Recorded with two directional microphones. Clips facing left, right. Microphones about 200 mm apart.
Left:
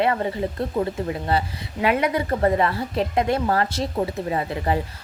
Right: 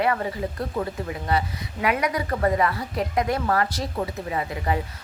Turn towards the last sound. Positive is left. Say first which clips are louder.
# left 3 dB
turn(degrees=30)  # may be behind; listen again after turning